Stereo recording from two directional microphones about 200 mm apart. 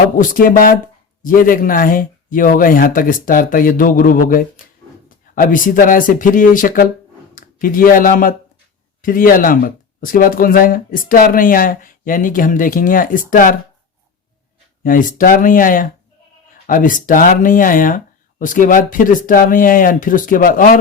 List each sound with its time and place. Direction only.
0.2 s speech: 45° left (ahead or behind)
14.8 s speech: 45° left (ahead or behind)